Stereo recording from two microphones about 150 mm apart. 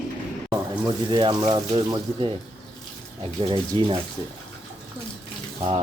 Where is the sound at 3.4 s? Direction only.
35° right (ahead or behind).